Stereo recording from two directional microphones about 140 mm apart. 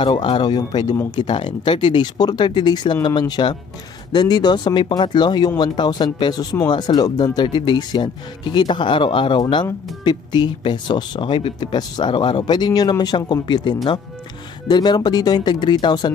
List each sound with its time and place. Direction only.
0.0 s speech: 35° left (ahead or behind)